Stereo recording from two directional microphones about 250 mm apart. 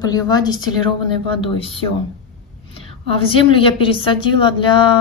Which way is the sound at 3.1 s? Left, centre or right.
Left.